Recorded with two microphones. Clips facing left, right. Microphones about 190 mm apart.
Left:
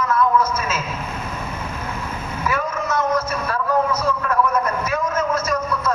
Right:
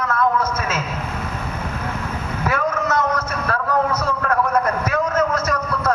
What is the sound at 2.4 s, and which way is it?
Vehicle, 60° right (ahead or behind).